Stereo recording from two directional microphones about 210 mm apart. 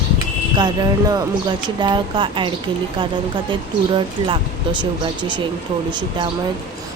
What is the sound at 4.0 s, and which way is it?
Speech, 25° right (ahead or behind).